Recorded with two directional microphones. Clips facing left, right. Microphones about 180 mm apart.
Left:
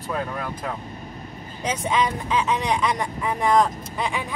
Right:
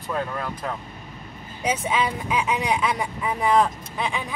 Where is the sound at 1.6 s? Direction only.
5° right (ahead or behind).